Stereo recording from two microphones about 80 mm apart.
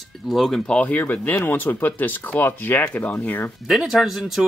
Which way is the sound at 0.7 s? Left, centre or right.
Centre.